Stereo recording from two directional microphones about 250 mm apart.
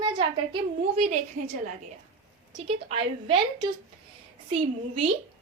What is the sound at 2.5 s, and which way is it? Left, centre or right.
A woman's voice, right.